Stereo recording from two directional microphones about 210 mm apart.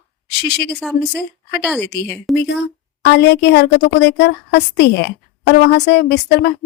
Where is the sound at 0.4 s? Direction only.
50° left (ahead or behind).